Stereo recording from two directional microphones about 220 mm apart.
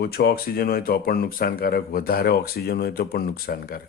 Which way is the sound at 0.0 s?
45° left (ahead or behind).